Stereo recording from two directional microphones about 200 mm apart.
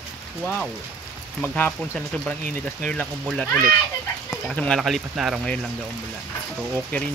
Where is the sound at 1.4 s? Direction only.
5° left (ahead or behind).